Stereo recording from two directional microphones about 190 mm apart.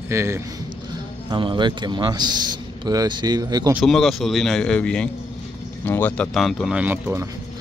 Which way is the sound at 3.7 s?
5° right (ahead or behind).